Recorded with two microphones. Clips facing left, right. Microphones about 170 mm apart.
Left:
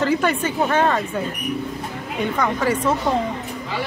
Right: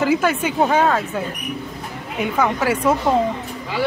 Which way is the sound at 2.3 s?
5° right (ahead or behind).